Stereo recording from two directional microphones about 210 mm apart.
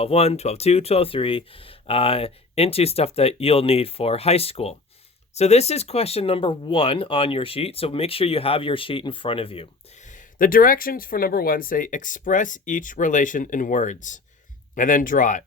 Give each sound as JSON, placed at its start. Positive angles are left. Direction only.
{"t": 0.0, "sound": "speech", "side_deg": 30}